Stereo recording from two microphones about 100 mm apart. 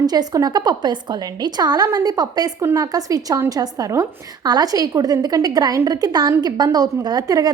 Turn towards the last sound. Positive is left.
turn(degrees=-40)  # may be behind; listen again after turning